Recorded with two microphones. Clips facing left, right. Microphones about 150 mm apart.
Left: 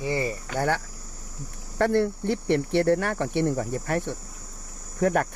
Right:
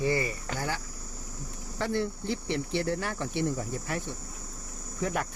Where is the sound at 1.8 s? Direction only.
65° left (ahead or behind).